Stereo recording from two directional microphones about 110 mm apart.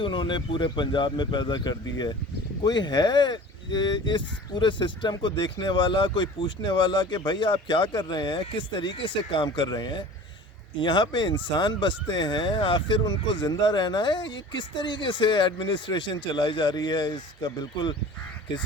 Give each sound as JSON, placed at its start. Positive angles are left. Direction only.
{"t": 0.0, "sound": "speech", "side_deg": 45}